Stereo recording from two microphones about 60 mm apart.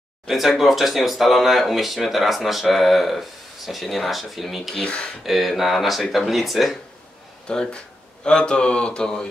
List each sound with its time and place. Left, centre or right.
0.3 s speech: centre
4.7 s speech: centre
5.2 s speech: centre
7.4 s speech: centre